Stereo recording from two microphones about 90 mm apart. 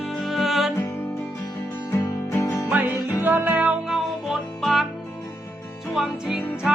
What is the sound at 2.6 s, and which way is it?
Music, 20° right (ahead or behind).